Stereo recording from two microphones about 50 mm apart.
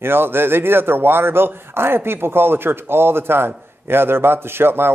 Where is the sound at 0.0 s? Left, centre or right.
Right.